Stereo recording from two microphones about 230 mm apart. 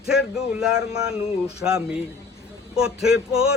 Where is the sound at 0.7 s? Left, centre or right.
Centre.